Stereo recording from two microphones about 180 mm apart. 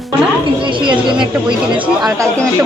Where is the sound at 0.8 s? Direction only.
25° right (ahead or behind).